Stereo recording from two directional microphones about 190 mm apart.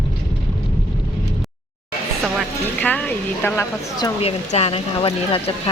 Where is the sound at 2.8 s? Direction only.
10° left (ahead or behind).